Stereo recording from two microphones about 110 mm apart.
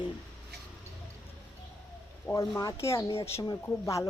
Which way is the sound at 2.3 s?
5° left (ahead or behind).